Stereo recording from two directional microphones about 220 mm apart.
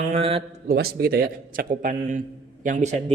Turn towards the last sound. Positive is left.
turn(degrees=-30)  # may be behind; listen again after turning